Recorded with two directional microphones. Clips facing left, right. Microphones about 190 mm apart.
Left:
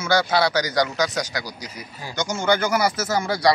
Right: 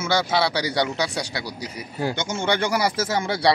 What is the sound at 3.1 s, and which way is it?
Speech, 25° right (ahead or behind).